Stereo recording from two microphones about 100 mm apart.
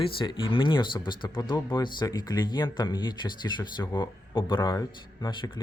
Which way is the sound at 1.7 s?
40° left (ahead or behind).